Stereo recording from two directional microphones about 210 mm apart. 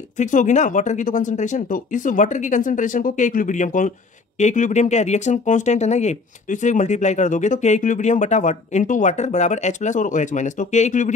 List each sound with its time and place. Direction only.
0.2 s speech: 35° left (ahead or behind)